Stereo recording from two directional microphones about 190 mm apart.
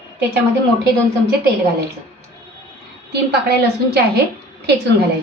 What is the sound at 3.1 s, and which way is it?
Speech, 60° right (ahead or behind).